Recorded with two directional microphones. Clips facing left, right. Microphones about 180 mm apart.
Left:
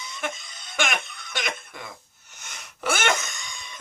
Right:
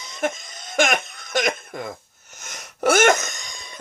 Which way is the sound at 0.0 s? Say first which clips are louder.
Right 7 dB; 45° right (ahead or behind).